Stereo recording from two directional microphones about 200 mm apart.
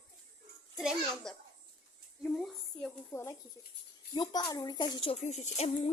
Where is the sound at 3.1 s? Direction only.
15° left (ahead or behind); by 5.9 s 35° left (ahead or behind).